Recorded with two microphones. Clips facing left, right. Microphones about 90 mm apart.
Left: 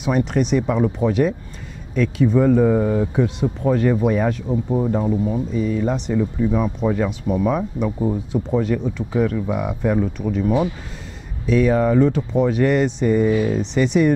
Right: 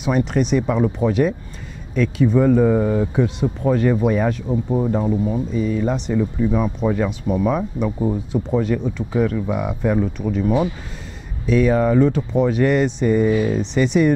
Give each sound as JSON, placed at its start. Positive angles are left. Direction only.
{"t": 0.0, "sound": "speech", "side_deg": -15}